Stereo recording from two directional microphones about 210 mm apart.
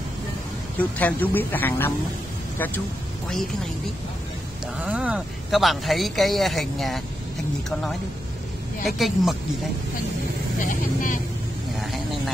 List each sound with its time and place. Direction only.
0.7 s speech: 5° left (ahead or behind)
4.7 s speech: 5° right (ahead or behind)
8.8 s speech: centre (ahead or behind)
10.6 s speech: 40° left (ahead or behind)